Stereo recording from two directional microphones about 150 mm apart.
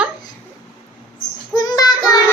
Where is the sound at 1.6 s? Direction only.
25° left (ahead or behind).